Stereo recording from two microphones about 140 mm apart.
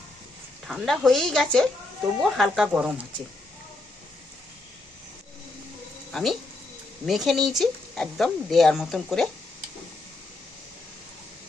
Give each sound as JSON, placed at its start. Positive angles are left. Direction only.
{"t": 0.7, "sound": "speech", "side_deg": 0}
{"t": 6.1, "sound": "speech", "side_deg": 5}